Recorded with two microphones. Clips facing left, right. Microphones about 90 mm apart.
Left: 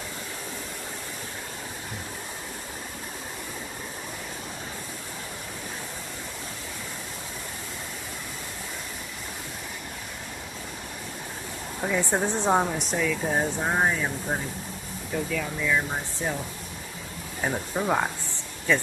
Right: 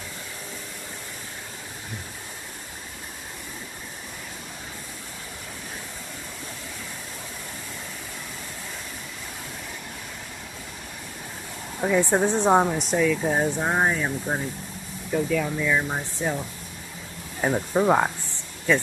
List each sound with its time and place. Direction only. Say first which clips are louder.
11.8 s speech: right 5 dB; 10° right (ahead or behind)
17.4 s speech: right 6 dB; 25° right (ahead or behind)